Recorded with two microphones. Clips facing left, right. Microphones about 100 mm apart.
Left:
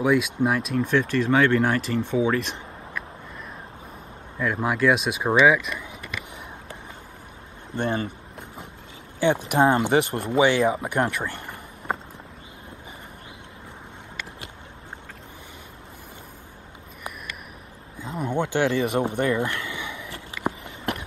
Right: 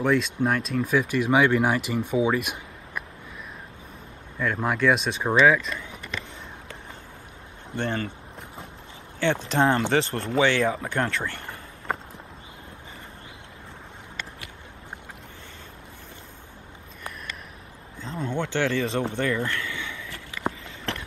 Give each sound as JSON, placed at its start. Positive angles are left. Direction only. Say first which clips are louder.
{"t": 0.0, "sound": "speech", "louder": "left 2 dB", "side_deg": 5}
{"t": 4.4, "sound": "speech", "louder": "left 1 dB", "side_deg": 5}
{"t": 7.7, "sound": "speech", "louder": "left 2 dB", "side_deg": 20}
{"t": 9.2, "sound": "speech", "louder": "left 3 dB", "side_deg": 15}
{"t": 10.9, "sound": "a sound", "louder": "left 2 dB", "side_deg": 15}
{"t": 18.0, "sound": "a sound", "louder": "left 3 dB", "side_deg": 15}